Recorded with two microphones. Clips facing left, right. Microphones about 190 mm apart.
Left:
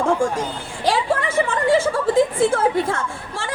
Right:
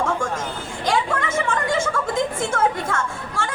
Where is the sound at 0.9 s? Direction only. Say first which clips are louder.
Left 2 dB; 30° left (ahead or behind).